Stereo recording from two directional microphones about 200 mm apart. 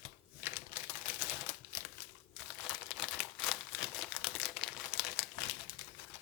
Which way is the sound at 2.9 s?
Centre (ahead or behind).